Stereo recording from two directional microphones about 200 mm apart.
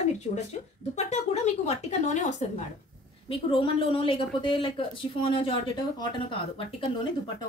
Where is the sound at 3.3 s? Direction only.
25° left (ahead or behind).